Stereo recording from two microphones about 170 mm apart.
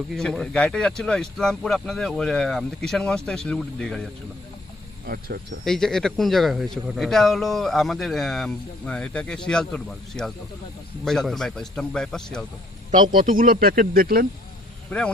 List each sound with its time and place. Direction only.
0.1 s speech: centre (ahead or behind)
5.0 s speech: 65° right (ahead or behind)
5.6 s speech: 5° left (ahead or behind)
12.9 s speech: 50° right (ahead or behind)
14.8 s speech: 5° left (ahead or behind)